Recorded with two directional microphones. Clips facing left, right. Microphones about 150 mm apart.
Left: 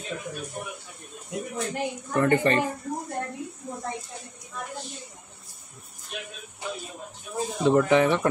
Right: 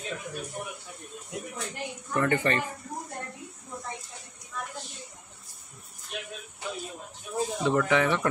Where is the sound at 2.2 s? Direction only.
25° left (ahead or behind).